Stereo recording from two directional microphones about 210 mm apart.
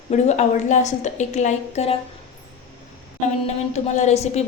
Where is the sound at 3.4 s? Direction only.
35° left (ahead or behind).